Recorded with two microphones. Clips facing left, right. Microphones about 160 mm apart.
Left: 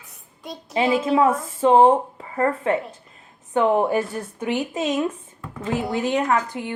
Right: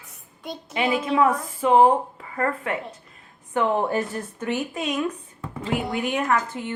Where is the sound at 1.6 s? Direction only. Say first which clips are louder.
Left 2 dB; 30° left (ahead or behind).